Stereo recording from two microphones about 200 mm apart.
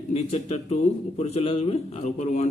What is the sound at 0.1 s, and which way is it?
A man's voice, 30° left (ahead or behind).